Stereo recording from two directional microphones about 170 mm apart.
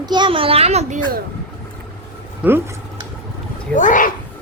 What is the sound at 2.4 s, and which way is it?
Speech, 10° right (ahead or behind).